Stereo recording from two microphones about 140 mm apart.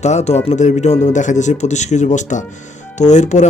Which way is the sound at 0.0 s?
55° left (ahead or behind).